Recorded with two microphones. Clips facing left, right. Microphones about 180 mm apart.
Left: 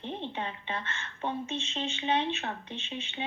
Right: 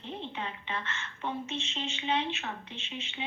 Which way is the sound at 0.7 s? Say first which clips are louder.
Left 1 dB; 30° left (ahead or behind).